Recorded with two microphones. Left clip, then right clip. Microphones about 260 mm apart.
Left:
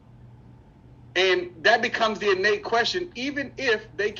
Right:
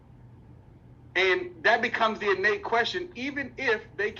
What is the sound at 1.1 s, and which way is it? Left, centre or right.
A man's voice, centre.